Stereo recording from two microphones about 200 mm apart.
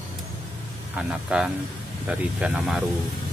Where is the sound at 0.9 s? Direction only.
5° right (ahead or behind).